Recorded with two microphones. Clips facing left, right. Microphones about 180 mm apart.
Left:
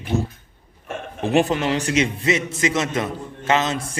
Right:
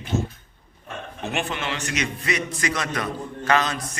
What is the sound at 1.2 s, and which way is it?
A man's voice, 35° left (ahead or behind).